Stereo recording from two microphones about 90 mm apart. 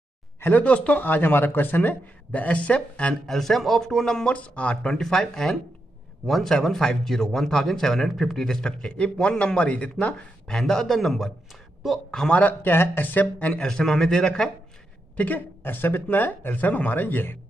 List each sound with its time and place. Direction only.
0.4 s a man's voice: 15° left (ahead or behind)
3.3 s a man's voice: centre (ahead or behind)
12.4 s a man's voice: 20° left (ahead or behind)
15.1 s speech: 20° left (ahead or behind)